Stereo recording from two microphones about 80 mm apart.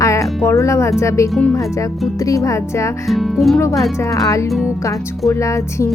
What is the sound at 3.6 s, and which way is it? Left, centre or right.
Speech, left.